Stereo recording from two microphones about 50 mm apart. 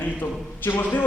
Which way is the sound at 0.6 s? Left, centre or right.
Left.